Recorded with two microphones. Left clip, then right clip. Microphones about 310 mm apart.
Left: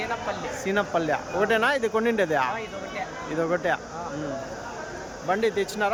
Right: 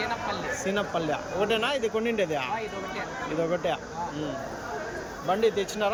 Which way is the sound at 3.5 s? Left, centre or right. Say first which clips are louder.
Left 5 dB; centre.